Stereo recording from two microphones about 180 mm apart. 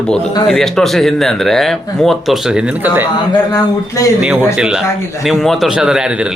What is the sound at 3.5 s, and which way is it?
Speech, 20° left (ahead or behind).